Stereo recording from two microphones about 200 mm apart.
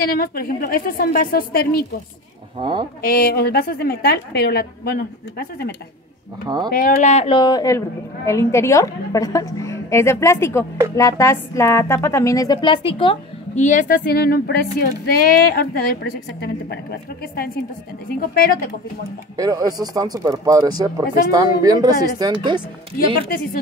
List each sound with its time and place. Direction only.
0.0 s a woman's voice: 45° left (ahead or behind)
2.6 s speech: 25° right (ahead or behind)
3.0 s a woman's voice: 50° left (ahead or behind)
6.4 s speech: 20° right (ahead or behind)
6.7 s a woman's voice: 40° left (ahead or behind)
18.2 s a woman's voice: 45° left (ahead or behind)
19.3 s speech: 20° right (ahead or behind)
23.3 s a woman's voice: 45° left (ahead or behind)